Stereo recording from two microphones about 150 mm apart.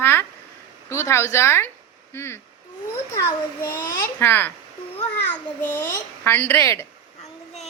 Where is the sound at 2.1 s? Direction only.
15° left (ahead or behind).